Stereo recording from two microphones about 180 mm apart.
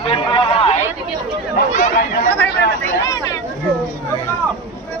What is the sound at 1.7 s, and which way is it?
Speech, 45° left (ahead or behind).